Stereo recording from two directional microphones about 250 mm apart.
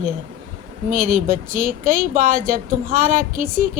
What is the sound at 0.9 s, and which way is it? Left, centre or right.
A woman's voice, right.